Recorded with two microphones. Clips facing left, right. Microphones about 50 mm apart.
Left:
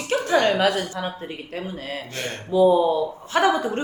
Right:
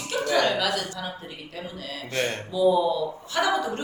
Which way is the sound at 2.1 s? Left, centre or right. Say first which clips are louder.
Right 8 dB; right.